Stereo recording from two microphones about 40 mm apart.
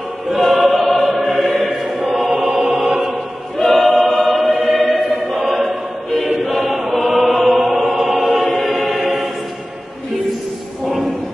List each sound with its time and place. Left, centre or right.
0.3 s choir: centre
2.2 s music: centre
3.5 s choir: centre